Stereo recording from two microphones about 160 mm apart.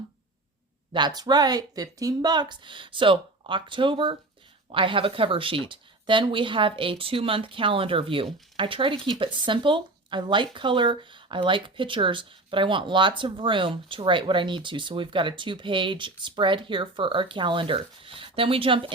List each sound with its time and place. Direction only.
0.9 s speech: 25° right (ahead or behind)